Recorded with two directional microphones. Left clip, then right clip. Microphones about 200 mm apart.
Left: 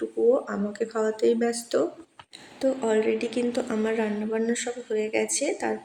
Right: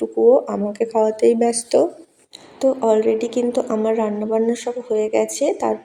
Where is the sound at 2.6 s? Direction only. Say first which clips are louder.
Right 8 dB; 10° right (ahead or behind).